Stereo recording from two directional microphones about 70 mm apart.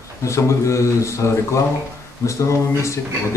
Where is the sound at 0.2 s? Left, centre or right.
Left.